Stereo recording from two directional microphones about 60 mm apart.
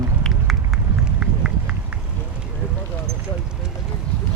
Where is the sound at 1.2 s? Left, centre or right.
Centre.